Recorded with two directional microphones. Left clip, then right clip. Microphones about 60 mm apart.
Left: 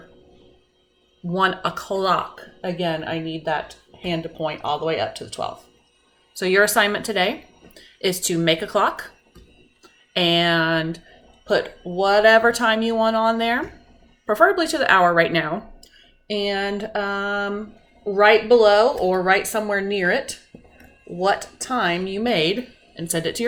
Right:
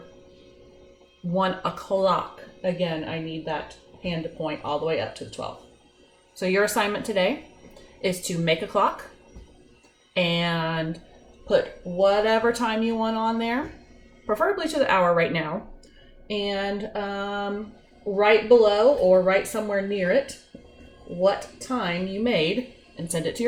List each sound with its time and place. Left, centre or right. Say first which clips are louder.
1.4 s a woman's voice: left 4 dB; left
10.2 s speech: left 6 dB; left
12.2 s speech: left 7 dB; left
21.2 s speech: left 2 dB; left